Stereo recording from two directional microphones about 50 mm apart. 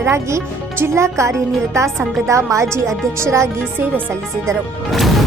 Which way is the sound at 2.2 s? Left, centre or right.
Right.